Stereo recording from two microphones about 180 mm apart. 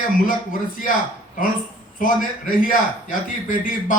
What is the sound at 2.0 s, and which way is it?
A man's voice, 50° left (ahead or behind).